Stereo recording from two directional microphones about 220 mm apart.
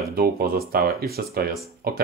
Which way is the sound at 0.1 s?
45° right (ahead or behind).